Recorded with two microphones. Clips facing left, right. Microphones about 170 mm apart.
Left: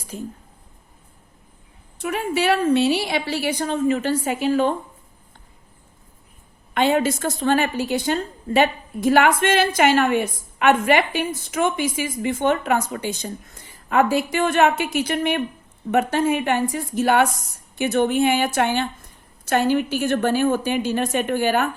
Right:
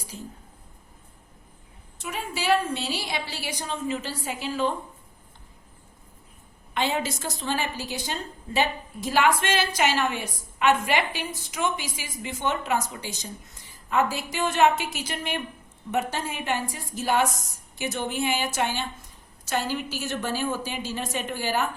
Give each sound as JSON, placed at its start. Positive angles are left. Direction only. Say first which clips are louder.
{"t": 0.1, "sound": "a woman's voice", "louder": "left 8 dB", "side_deg": 60}
{"t": 2.0, "sound": "a woman's voice", "louder": "left 10 dB", "side_deg": 60}
{"t": 6.7, "sound": "a woman's voice", "louder": "left 8 dB", "side_deg": 55}